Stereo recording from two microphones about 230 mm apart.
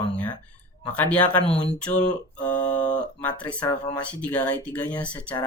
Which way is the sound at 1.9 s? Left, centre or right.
Left.